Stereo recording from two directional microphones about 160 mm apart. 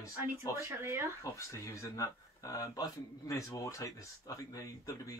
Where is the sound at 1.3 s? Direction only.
20° left (ahead or behind).